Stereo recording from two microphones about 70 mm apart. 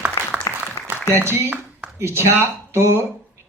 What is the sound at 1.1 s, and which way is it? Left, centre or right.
Speech, right.